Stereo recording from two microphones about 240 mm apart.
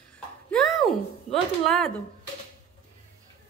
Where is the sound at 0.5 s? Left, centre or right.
Centre.